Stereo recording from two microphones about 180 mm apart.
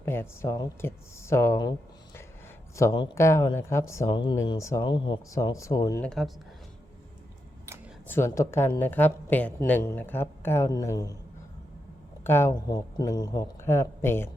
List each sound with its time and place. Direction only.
0.0 s speech: 15° left (ahead or behind)
2.7 s speech: 20° left (ahead or behind)
6.0 s speech: centre (ahead or behind)
8.0 s speech: 15° left (ahead or behind)
12.2 s speech: 15° left (ahead or behind)